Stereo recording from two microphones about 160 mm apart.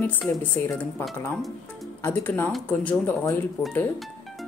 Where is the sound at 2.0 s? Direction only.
10° left (ahead or behind).